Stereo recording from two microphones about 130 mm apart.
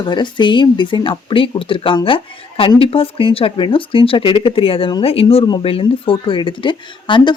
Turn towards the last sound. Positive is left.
turn(degrees=40)  # may be behind; listen again after turning